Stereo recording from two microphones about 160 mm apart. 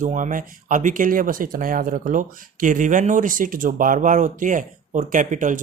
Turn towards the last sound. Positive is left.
turn(degrees=-55)  # may be behind; listen again after turning